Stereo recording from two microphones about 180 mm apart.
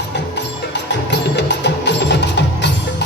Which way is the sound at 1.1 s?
70° left (ahead or behind).